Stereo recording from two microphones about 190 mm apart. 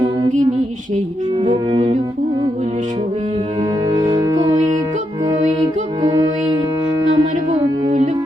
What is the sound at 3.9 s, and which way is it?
Music, 20° right (ahead or behind).